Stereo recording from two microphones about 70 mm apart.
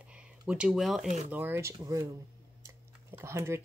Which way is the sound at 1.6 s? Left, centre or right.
Right.